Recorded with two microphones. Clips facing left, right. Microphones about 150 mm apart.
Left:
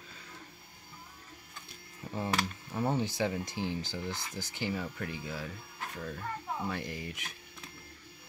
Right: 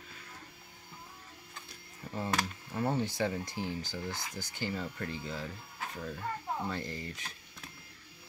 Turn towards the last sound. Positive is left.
turn(degrees=15)  # may be behind; listen again after turning